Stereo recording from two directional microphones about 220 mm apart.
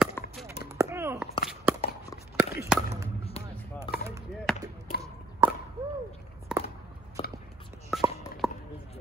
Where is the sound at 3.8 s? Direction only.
15° right (ahead or behind).